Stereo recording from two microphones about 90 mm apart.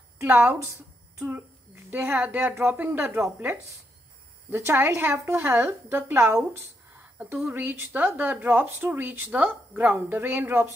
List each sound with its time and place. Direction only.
0.2 s speech: 25° right (ahead or behind)
1.9 s speech: 20° right (ahead or behind)
7.0 s a sound: 20° right (ahead or behind)
7.5 s speech: 20° right (ahead or behind)